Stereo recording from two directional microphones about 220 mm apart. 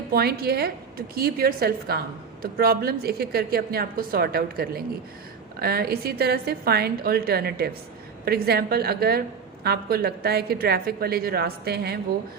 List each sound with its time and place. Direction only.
0.1 s speech: 45° right (ahead or behind)